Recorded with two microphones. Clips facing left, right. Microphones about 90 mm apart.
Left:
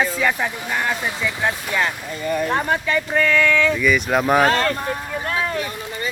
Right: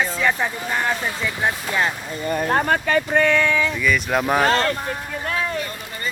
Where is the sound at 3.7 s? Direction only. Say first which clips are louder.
Left 2 dB; centre (ahead or behind).